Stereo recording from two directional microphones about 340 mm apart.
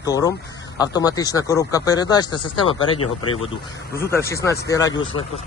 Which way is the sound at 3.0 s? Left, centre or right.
Left.